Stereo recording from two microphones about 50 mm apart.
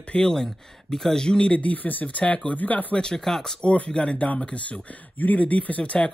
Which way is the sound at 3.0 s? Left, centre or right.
Centre.